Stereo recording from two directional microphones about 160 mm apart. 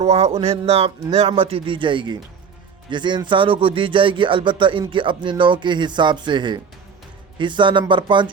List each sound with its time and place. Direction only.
0.0 s speech: 40° right (ahead or behind)